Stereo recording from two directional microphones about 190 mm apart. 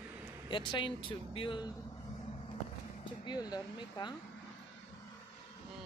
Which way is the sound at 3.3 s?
20° left (ahead or behind).